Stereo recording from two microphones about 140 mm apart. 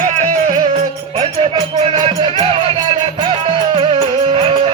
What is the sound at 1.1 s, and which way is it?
Music, 35° right (ahead or behind).